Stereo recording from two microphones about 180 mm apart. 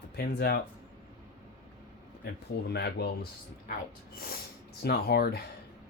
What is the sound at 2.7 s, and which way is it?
Speech, 65° left (ahead or behind).